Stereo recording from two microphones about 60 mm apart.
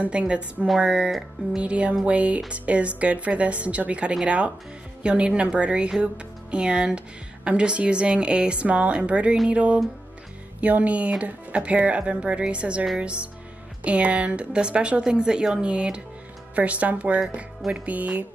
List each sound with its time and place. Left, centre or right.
0.0 s a woman's voice: centre